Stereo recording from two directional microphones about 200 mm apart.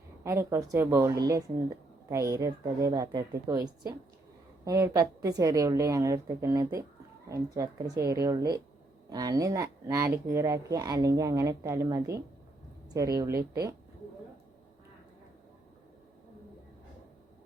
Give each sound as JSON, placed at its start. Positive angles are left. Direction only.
{"t": 0.3, "sound": "speech", "side_deg": -15}